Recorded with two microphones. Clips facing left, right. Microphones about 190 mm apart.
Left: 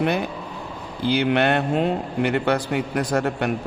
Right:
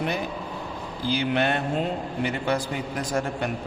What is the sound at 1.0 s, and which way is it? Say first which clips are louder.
A man's voice: left 5 dB; 65° left (ahead or behind).